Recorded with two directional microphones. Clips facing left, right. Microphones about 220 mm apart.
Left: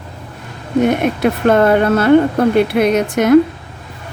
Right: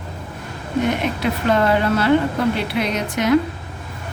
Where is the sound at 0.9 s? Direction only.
50° left (ahead or behind).